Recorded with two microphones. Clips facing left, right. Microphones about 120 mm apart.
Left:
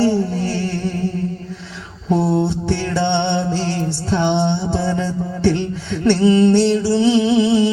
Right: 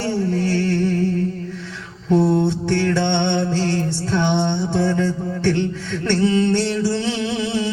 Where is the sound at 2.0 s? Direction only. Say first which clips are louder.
Right 1 dB; 10° left (ahead or behind).